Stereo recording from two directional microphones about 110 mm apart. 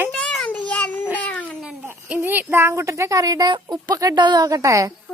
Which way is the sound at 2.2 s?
20° right (ahead or behind).